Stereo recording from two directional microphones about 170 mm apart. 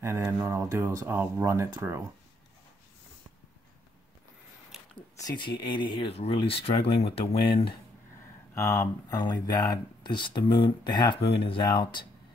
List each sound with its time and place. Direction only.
0.0 s speech: 15° right (ahead or behind)
5.1 s speech: 25° left (ahead or behind)
8.5 s speech: 15° left (ahead or behind)